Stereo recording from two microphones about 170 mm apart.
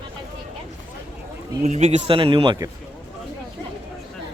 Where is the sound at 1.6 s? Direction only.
40° right (ahead or behind).